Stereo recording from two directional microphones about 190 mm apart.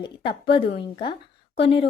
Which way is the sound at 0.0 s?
25° left (ahead or behind).